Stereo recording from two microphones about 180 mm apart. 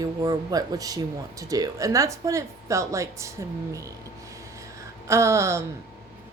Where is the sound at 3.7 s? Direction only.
15° right (ahead or behind).